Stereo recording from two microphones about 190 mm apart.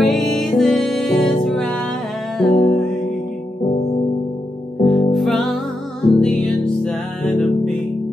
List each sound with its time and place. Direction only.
0.0 s music: centre (ahead or behind)
4.8 s music: centre (ahead or behind)